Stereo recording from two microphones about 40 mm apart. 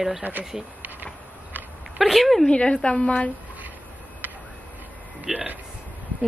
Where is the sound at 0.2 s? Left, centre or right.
Right.